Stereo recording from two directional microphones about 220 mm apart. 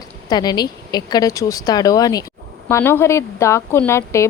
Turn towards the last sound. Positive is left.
turn(degrees=10)  # may be behind; listen again after turning